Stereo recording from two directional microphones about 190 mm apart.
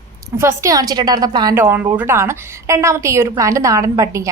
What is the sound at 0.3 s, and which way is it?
A woman's voice, 15° right (ahead or behind).